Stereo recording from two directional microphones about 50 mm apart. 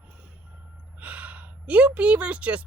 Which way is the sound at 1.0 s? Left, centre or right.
Right.